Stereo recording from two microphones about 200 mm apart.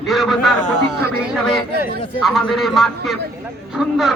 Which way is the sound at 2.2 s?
Centre (ahead or behind).